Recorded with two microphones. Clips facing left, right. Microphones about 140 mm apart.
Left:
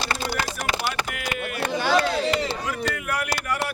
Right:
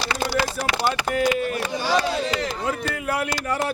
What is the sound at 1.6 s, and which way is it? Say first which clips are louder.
Speech: left 5 dB; 55° left (ahead or behind).